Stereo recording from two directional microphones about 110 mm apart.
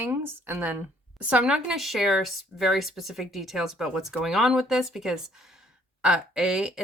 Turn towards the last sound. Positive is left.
turn(degrees=-5)  # may be behind; listen again after turning